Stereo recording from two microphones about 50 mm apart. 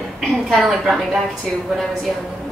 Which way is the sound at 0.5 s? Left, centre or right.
Centre.